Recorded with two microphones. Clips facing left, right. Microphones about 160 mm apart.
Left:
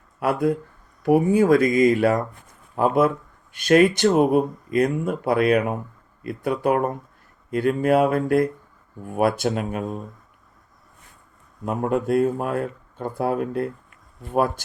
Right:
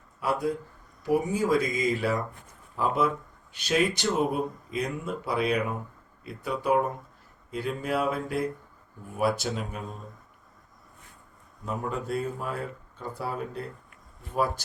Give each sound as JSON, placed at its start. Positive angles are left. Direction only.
{"t": 0.2, "sound": "speech", "side_deg": 60}
{"t": 11.6, "sound": "speech", "side_deg": 60}